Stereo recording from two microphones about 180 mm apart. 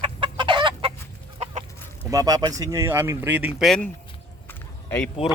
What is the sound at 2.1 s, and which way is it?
Speech, 20° right (ahead or behind).